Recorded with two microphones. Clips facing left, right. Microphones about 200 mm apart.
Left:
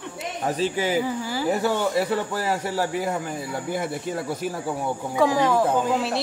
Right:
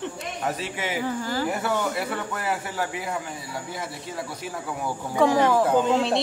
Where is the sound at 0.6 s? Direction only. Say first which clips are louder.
Left 7 dB; 35° left (ahead or behind).